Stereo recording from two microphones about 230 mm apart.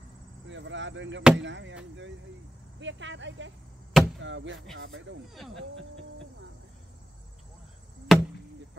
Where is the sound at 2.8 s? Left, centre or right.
Right.